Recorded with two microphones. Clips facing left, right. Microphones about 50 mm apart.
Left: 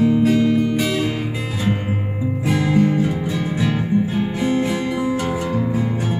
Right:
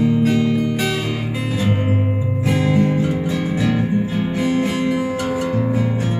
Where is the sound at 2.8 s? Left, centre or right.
Right.